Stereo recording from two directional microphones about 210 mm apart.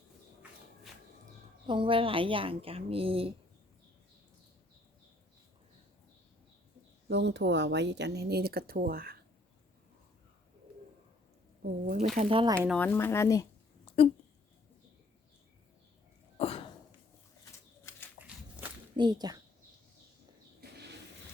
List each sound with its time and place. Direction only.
1.6 s speech: 25° right (ahead or behind)
7.1 s speech: 55° right (ahead or behind)
11.6 s speech: 40° right (ahead or behind)
12.5 s a woman's voice: 5° left (ahead or behind)
16.4 s cough: 25° left (ahead or behind)
18.2 s walk: 5° right (ahead or behind)
18.9 s speech: 20° right (ahead or behind)